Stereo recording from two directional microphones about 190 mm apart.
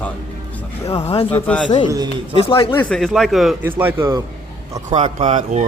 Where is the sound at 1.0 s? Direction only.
30° left (ahead or behind).